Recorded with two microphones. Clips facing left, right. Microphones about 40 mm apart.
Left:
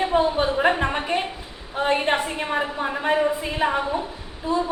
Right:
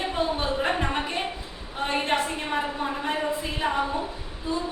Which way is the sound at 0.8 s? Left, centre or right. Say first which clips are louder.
Left 4 dB; left.